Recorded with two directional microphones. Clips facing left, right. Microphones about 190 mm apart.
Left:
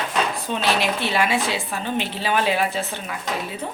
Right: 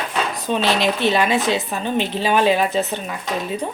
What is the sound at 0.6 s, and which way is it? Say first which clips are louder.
Speech: right 3 dB; 20° right (ahead or behind).